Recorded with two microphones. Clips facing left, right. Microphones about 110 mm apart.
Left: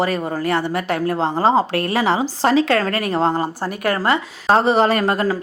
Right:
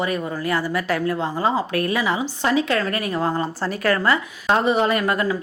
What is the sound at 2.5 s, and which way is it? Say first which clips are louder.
Speech: left 4 dB; 90° left.